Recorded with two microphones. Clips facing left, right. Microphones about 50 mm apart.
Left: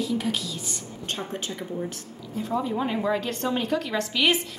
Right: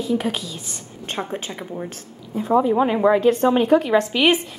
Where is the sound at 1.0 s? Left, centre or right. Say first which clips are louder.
Right 5 dB; right.